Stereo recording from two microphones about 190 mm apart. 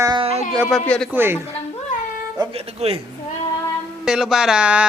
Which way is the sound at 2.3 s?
30° right (ahead or behind).